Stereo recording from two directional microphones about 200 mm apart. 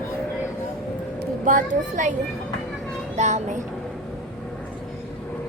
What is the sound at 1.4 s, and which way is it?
Speech, 40° right (ahead or behind).